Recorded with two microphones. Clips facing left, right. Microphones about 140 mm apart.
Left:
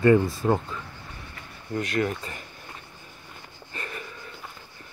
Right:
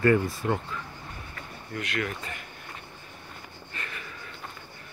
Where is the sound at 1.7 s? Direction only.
35° left (ahead or behind).